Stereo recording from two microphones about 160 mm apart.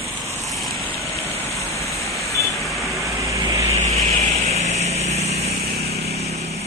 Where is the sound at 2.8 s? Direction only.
20° right (ahead or behind).